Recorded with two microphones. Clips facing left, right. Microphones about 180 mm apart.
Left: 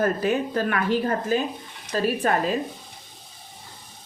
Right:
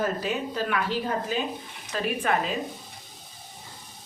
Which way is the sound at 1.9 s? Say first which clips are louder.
Left 4 dB; 40° left (ahead or behind).